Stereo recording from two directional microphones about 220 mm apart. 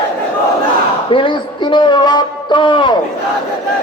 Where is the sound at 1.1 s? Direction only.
25° left (ahead or behind).